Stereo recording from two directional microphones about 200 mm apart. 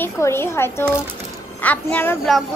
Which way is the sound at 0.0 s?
10° left (ahead or behind).